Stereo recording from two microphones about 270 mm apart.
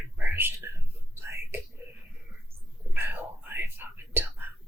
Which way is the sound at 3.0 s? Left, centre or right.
Centre.